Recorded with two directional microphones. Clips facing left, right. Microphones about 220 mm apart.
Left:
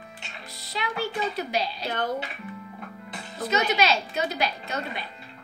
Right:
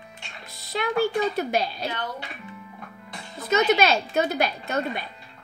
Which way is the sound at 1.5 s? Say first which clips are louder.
Right 3 dB; 50° right (ahead or behind).